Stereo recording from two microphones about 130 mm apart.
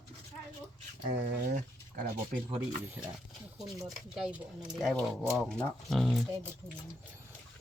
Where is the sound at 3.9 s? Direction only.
5° right (ahead or behind).